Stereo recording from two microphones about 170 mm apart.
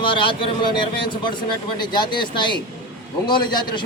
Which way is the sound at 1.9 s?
25° left (ahead or behind).